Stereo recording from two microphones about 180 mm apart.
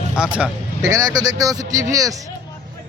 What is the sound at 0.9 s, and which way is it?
Speech, 20° right (ahead or behind).